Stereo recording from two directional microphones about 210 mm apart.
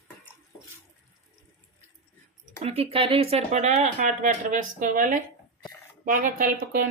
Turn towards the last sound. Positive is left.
turn(degrees=-40)  # may be behind; listen again after turning